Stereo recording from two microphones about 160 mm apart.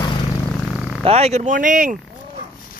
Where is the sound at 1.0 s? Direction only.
40° right (ahead or behind).